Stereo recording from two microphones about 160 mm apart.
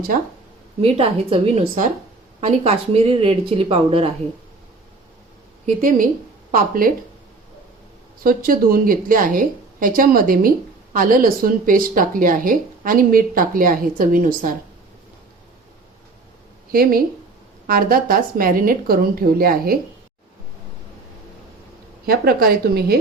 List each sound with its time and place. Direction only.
0.1 s speech: 60° right (ahead or behind)
0.8 s speech: 35° right (ahead or behind)
2.4 s speech: 40° right (ahead or behind)
5.6 s speech: 55° right (ahead or behind)
8.2 s speech: 60° right (ahead or behind)
16.7 s a woman's voice: 70° right (ahead or behind)
22.0 s a woman's voice: 70° right (ahead or behind)